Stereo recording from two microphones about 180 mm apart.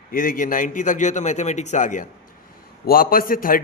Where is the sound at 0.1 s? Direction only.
50° left (ahead or behind).